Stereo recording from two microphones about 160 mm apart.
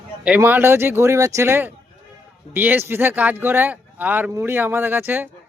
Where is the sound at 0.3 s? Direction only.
10° right (ahead or behind).